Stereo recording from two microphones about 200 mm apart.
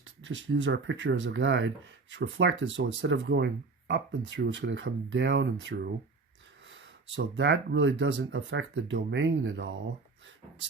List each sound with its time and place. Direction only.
0.0 s speech: 70° right (ahead or behind)